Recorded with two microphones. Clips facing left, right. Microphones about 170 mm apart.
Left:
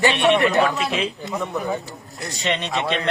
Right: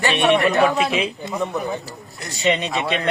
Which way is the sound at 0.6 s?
15° right (ahead or behind).